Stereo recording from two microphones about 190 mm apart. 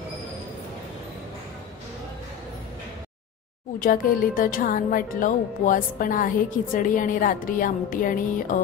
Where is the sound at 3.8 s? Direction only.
45° left (ahead or behind).